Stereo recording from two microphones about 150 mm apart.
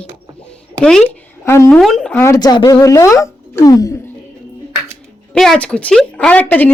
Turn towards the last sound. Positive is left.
turn(degrees=10)  # may be behind; listen again after turning